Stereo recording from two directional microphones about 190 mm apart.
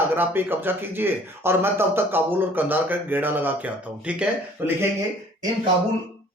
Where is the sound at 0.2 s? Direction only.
10° right (ahead or behind).